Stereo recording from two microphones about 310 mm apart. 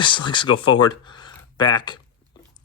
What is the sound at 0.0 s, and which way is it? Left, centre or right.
Speech, centre.